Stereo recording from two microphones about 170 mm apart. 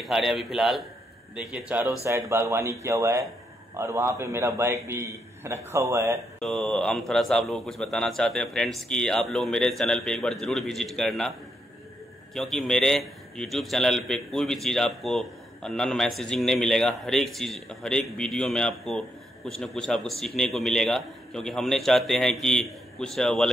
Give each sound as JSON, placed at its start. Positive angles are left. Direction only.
{"t": 0.0, "sound": "a man's voice", "side_deg": 0}
{"t": 6.4, "sound": "a man's voice", "side_deg": 0}
{"t": 12.4, "sound": "a man's voice", "side_deg": 0}